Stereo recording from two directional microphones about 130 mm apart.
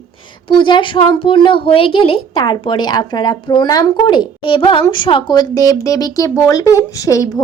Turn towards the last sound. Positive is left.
turn(degrees=25)  # may be behind; listen again after turning